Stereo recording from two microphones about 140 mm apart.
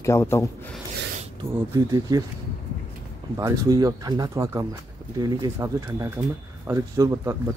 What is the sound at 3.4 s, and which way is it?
Speech, 25° right (ahead or behind).